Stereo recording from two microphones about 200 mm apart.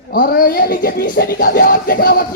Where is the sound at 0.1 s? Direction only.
45° left (ahead or behind).